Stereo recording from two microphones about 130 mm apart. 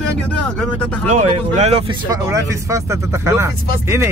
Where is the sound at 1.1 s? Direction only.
65° right (ahead or behind).